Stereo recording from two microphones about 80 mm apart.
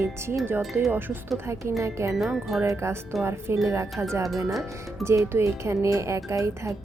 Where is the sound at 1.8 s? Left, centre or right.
Right.